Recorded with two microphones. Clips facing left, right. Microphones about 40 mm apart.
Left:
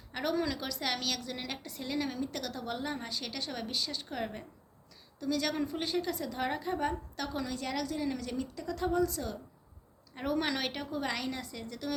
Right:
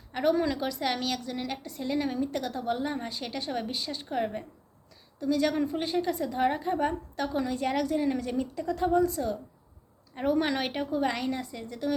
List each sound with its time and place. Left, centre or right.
0.1 s a woman's voice: centre